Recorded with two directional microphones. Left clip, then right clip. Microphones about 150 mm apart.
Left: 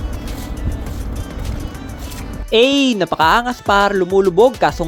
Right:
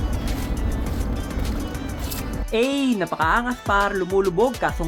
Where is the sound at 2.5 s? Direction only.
30° left (ahead or behind).